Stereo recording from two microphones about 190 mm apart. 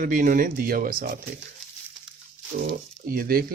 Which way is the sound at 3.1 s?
50° right (ahead or behind).